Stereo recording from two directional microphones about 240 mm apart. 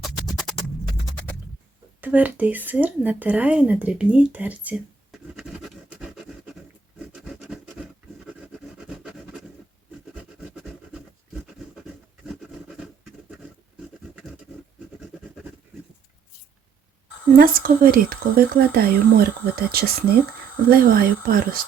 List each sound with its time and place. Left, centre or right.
0.0 s music: centre
2.0 s speech: centre
7.1 s scratch: centre
12.2 s a sound: centre
17.3 s speech: right